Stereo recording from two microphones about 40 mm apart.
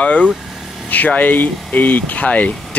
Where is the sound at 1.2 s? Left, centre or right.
Left.